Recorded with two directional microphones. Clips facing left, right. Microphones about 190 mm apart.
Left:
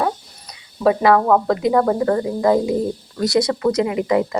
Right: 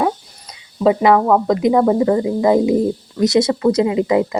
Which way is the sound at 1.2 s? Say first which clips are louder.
Right 2 dB; 15° right (ahead or behind).